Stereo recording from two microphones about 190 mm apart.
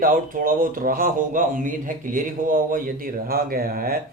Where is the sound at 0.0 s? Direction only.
50° right (ahead or behind).